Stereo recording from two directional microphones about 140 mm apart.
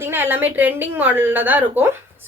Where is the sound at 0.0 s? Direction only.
15° right (ahead or behind).